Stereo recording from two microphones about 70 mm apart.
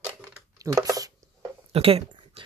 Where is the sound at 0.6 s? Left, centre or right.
Right.